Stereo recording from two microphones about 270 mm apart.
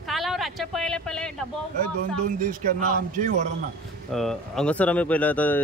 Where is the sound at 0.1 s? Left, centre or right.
Centre.